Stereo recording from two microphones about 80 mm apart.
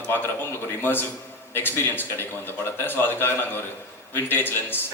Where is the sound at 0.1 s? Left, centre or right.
Left.